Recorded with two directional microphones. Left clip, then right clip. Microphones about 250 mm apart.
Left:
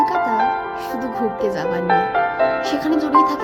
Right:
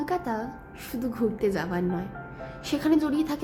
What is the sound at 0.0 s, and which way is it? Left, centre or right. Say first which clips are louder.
Music: left 12 dB; left.